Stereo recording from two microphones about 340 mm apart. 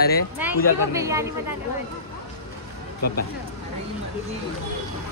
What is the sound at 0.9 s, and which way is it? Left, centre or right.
Speech, centre.